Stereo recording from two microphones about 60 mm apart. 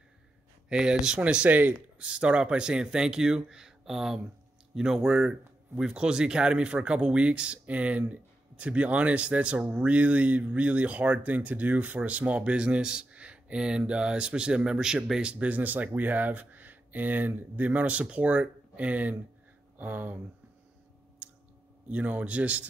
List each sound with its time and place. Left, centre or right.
0.7 s speech: centre
2.0 s speech: centre; by 20.2 s right
21.2 s a sound: right
21.8 s speech: right